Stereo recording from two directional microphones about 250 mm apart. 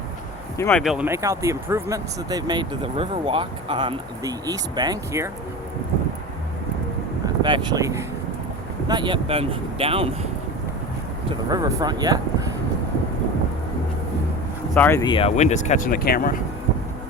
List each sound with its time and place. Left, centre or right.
0.5 s speech: centre
0.8 s speech: centre
7.3 s speech: centre
11.3 s speech: centre
14.8 s speech: centre; by 16.4 s left